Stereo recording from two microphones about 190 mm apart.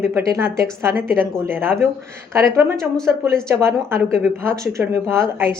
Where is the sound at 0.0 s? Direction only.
15° right (ahead or behind).